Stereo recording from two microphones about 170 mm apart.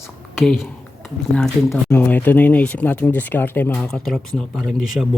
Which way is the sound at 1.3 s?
5° left (ahead or behind).